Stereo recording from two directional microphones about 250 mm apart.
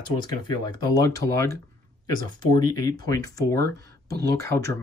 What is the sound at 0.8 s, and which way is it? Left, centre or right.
Speech, centre.